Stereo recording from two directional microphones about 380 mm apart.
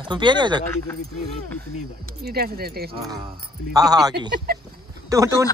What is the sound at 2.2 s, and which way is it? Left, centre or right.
Speech, right.